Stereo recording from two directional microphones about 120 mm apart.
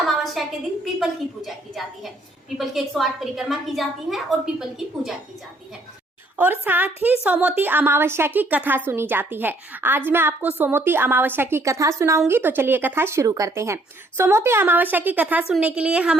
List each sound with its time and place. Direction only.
0.0 s a sound: centre (ahead or behind)
1.5 s a woman's voice: centre (ahead or behind)
6.3 s a woman's voice: 15° right (ahead or behind)